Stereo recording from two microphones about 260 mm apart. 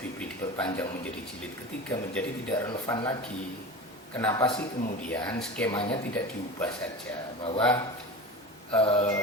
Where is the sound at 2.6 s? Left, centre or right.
Centre.